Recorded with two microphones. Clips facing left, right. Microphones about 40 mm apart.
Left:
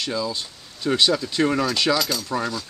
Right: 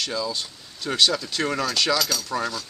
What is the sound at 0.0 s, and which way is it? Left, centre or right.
Speech, centre.